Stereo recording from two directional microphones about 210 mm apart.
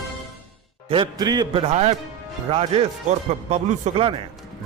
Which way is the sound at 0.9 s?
20° right (ahead or behind).